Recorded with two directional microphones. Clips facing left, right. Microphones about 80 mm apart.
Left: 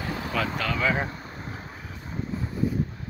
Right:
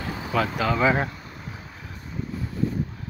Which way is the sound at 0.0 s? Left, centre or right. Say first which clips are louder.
Right 3 dB; centre.